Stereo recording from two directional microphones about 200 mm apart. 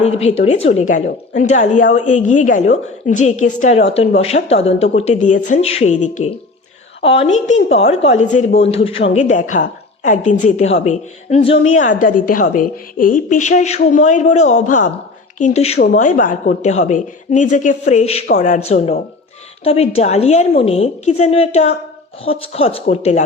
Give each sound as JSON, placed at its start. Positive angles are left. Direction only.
{"t": 0.0, "sound": "a woman's voice", "side_deg": 30}
{"t": 15.8, "sound": "a woman's voice", "side_deg": 45}